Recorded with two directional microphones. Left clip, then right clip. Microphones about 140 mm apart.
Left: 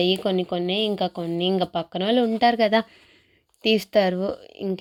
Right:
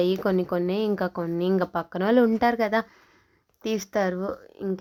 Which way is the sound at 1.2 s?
15° left (ahead or behind).